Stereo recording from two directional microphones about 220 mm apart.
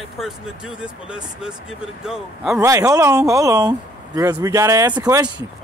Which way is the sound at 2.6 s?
15° right (ahead or behind).